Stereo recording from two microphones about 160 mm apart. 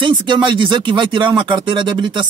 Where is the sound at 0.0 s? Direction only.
30° right (ahead or behind).